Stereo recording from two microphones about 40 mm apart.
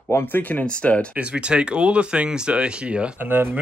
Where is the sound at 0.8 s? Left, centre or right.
Left.